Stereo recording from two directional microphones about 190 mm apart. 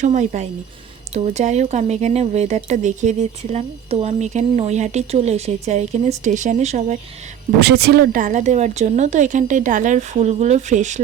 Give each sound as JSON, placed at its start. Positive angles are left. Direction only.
{"t": 0.0, "sound": "speech", "side_deg": -40}
{"t": 7.6, "sound": "speech", "side_deg": -60}
{"t": 8.2, "sound": "speech", "side_deg": -40}